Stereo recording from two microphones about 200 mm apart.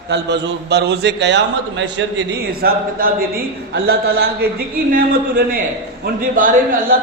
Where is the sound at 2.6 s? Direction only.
45° right (ahead or behind).